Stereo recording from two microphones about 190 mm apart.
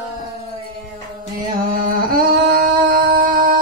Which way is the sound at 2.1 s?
50° right (ahead or behind).